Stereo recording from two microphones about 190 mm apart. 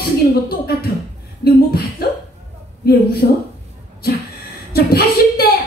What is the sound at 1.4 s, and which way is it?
A woman's voice, 55° left (ahead or behind).